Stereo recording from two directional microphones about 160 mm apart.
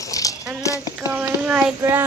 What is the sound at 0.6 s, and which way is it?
Clip-clop, 20° left (ahead or behind).